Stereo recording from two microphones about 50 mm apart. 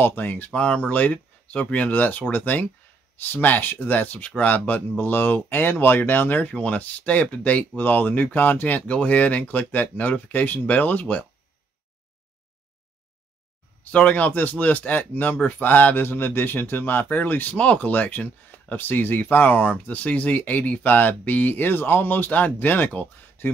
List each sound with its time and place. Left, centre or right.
0.0 s speech: left
0.5 s speech: left
6.5 s speech: left
8.8 s speech: left
13.9 s speech: left